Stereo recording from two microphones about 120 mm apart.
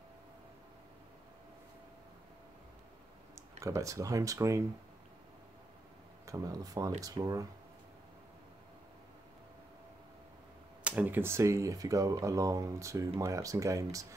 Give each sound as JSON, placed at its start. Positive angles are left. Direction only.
{"t": 3.3, "sound": "speech", "side_deg": -25}
{"t": 6.2, "sound": "speech", "side_deg": -30}
{"t": 10.8, "sound": "speech", "side_deg": -10}